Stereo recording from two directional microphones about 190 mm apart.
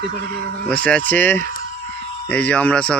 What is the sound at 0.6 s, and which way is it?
Speech, 5° left (ahead or behind).